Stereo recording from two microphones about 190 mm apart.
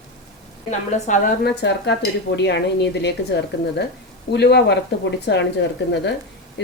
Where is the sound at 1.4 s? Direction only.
65° left (ahead or behind).